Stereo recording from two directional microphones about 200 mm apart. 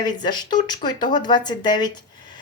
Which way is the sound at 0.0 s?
20° left (ahead or behind).